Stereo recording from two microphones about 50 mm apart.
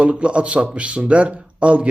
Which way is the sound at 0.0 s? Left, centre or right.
Right.